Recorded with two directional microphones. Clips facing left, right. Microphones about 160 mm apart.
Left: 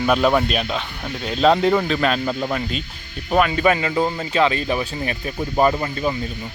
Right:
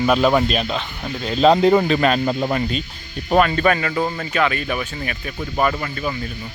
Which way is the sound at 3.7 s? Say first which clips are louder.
Left 1 dB; 15° left (ahead or behind).